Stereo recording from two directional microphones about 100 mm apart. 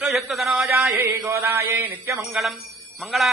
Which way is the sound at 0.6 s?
30° right (ahead or behind).